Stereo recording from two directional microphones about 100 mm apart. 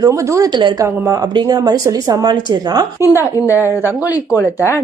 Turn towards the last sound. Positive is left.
turn(degrees=30)  # may be behind; listen again after turning